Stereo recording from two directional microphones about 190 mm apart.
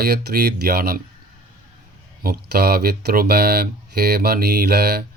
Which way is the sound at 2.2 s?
55° right (ahead or behind).